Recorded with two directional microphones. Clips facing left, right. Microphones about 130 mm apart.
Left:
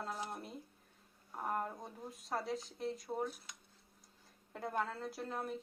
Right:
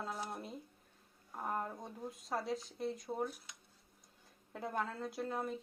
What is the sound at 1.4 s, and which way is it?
Speech, centre (ahead or behind).